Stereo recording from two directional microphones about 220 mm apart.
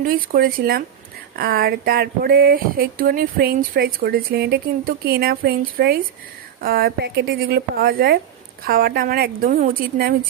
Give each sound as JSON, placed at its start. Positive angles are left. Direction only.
{"t": 0.0, "sound": "speech", "side_deg": -40}